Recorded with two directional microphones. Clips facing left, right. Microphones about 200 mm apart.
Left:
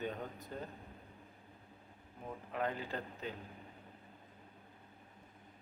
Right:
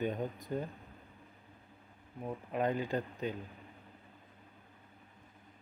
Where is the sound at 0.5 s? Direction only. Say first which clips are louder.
Right 8 dB; 15° right (ahead or behind).